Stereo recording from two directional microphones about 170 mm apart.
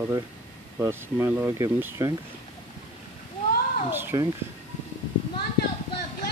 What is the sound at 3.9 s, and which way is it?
Speech, 15° right (ahead or behind).